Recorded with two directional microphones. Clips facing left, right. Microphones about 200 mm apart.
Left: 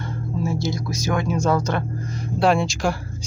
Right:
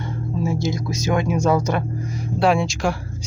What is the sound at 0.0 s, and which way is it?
Speech, 20° right (ahead or behind).